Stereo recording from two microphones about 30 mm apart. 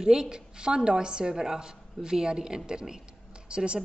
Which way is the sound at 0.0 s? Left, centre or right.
Right.